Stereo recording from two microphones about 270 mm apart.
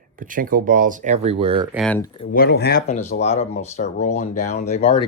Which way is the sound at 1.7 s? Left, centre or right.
Centre.